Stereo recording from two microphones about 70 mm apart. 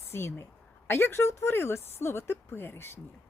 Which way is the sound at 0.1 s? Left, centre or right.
Left.